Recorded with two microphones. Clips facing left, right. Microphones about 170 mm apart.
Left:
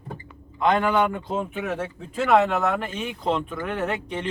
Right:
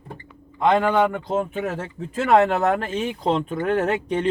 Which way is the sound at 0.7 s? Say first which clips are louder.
Right 2 dB; 40° right (ahead or behind).